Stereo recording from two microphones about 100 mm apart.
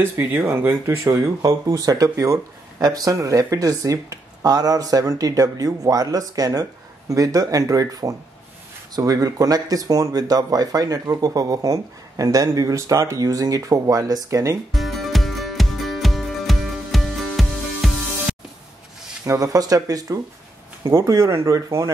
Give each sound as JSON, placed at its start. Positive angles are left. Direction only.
{"t": 0.0, "sound": "speech", "side_deg": -25}
{"t": 14.7, "sound": "music", "side_deg": 0}
{"t": 19.2, "sound": "speech", "side_deg": -35}
{"t": 20.8, "sound": "speech", "side_deg": -30}